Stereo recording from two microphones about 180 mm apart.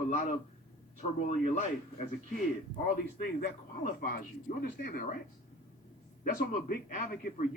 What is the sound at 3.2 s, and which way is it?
A man's voice, 50° left (ahead or behind).